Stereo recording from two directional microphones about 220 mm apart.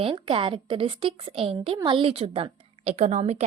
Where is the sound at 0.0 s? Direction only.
25° right (ahead or behind).